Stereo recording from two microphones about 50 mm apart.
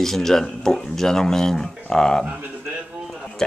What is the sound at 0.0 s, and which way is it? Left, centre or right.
Speech, centre.